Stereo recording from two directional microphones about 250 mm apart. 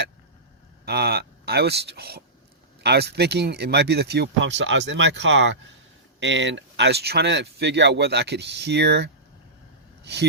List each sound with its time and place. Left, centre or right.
0.9 s speech: right